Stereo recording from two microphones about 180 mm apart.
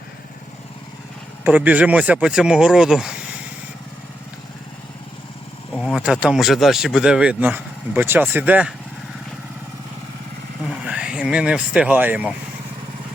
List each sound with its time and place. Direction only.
1.5 s speech: 10° right (ahead or behind)
5.7 s speech: 5° right (ahead or behind)
10.7 s speech: 5° right (ahead or behind)